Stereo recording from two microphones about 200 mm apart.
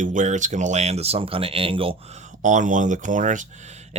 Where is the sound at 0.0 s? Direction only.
40° right (ahead or behind).